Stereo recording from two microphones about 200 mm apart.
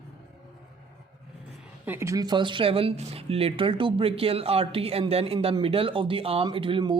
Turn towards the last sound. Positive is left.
turn(degrees=-25)  # may be behind; listen again after turning